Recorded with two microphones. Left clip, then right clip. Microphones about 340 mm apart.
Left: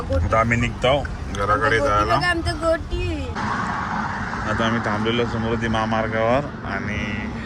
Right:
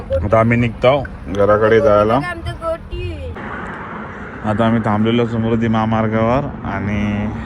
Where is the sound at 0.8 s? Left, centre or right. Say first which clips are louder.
Right 7 dB; right.